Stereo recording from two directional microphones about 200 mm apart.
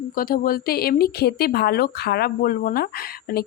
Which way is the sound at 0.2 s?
45° left (ahead or behind).